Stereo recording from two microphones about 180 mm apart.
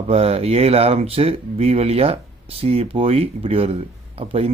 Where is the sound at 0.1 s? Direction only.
35° right (ahead or behind).